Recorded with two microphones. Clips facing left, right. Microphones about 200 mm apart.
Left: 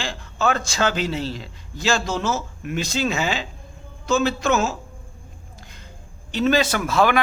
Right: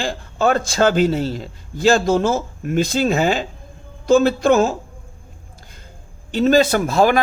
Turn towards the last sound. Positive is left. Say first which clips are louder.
# right 4 dB
turn(degrees=-40)  # may be behind; listen again after turning